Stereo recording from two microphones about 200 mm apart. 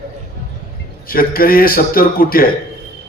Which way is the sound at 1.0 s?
45° left (ahead or behind).